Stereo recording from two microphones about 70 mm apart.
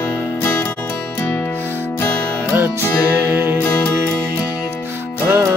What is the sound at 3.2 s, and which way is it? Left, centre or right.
Music, right.